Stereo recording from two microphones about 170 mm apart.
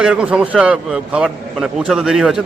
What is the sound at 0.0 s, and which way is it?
A man's voice, 5° right (ahead or behind).